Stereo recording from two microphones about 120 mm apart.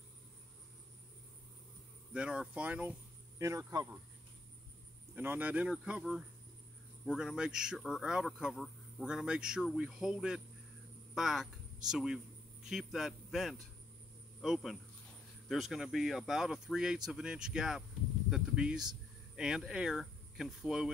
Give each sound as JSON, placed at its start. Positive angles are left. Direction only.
{"t": 2.1, "sound": "speech", "side_deg": -10}
{"t": 3.3, "sound": "speech", "side_deg": -25}
{"t": 5.1, "sound": "speech", "side_deg": -15}